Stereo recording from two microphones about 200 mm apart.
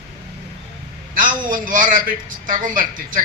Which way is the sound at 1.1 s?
45° right (ahead or behind).